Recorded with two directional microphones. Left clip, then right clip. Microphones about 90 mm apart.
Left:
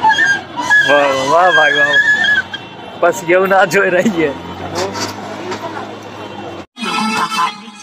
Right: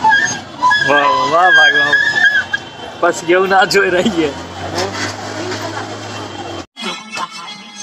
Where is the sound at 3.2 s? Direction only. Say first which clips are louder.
Even; 35° left (ahead or behind).